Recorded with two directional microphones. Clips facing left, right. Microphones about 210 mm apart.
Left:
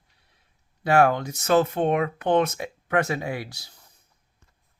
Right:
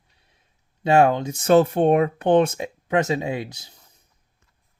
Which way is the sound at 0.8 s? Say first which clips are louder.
Right 3 dB; 25° right (ahead or behind).